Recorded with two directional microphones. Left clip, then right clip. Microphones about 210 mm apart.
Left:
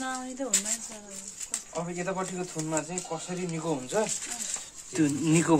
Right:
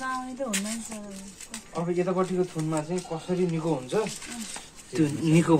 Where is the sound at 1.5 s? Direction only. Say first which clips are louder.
Right 5 dB; 50° left (ahead or behind).